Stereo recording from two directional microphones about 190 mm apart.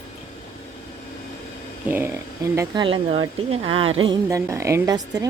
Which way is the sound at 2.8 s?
25° right (ahead or behind).